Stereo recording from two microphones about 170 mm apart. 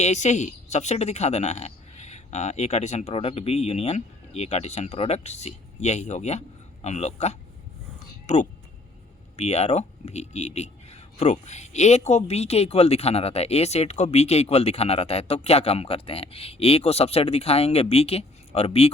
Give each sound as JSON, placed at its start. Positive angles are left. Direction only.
{"t": 0.0, "sound": "speech", "side_deg": 40}